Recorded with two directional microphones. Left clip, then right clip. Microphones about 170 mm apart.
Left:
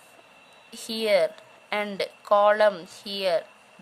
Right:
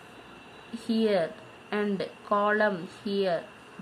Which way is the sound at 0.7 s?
60° left (ahead or behind).